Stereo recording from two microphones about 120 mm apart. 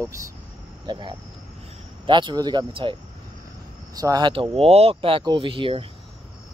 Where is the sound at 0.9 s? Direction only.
40° right (ahead or behind).